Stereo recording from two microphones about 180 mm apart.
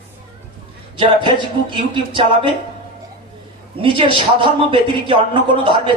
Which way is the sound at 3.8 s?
30° right (ahead or behind).